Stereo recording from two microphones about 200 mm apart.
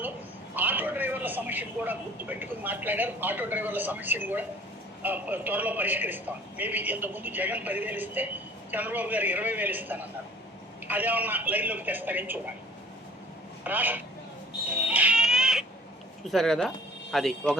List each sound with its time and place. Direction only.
0.5 s a man's voice: 10° right (ahead or behind)
13.7 s speech: 10° right (ahead or behind)
14.8 s a sound: 5° right (ahead or behind)
16.2 s speech: centre (ahead or behind)